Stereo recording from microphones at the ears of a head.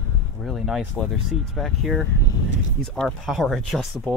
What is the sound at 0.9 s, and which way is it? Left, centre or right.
Speech, left.